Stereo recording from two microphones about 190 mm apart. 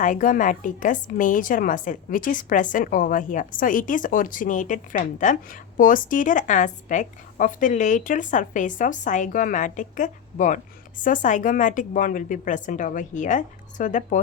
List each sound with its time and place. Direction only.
0.0 s a woman's voice: 45° left (ahead or behind)